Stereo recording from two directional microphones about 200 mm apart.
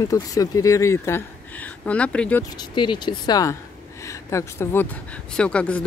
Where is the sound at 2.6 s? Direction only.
25° left (ahead or behind); by 5.8 s 5° left (ahead or behind).